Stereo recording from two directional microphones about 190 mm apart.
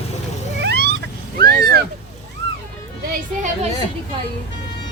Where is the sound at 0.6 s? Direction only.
60° right (ahead or behind).